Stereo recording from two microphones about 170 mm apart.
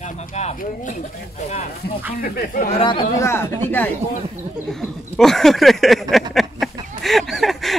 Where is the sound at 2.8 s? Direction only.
30° left (ahead or behind).